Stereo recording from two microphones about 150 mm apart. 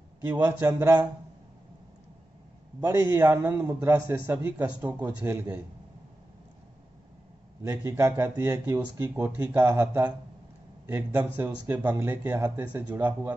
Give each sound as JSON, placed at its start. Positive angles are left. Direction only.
{"t": 0.3, "sound": "a man's voice", "side_deg": -20}
{"t": 2.8, "sound": "speech", "side_deg": -20}
{"t": 7.6, "sound": "speech", "side_deg": -20}